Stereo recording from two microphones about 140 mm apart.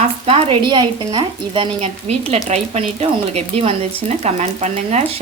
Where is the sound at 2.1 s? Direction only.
50° right (ahead or behind).